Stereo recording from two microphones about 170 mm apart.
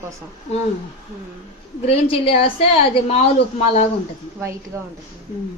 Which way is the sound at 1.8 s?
35° left (ahead or behind).